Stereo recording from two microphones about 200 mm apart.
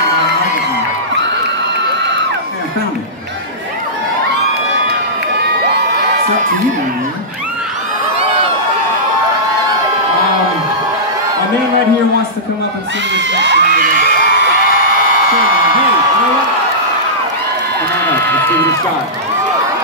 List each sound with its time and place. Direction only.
13.1 s crowd: 65° right (ahead or behind)